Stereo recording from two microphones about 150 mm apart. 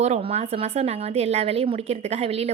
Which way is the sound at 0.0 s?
45° right (ahead or behind).